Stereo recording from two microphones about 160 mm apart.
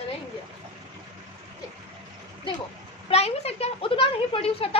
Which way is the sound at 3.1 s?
40° left (ahead or behind).